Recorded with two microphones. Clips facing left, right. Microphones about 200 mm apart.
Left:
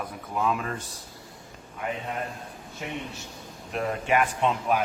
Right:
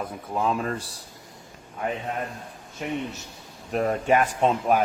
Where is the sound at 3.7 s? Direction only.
40° right (ahead or behind).